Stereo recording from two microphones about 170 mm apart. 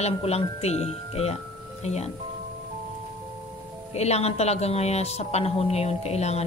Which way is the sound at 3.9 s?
40° left (ahead or behind).